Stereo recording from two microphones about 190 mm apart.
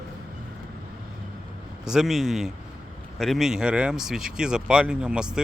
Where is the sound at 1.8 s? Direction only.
5° right (ahead or behind).